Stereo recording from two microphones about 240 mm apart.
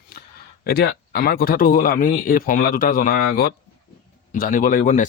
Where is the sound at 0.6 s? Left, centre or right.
Left.